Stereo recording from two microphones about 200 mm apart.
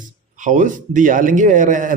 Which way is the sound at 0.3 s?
40° right (ahead or behind).